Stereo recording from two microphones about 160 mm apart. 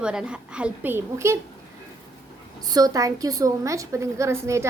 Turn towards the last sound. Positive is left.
turn(degrees=-15)  # may be behind; listen again after turning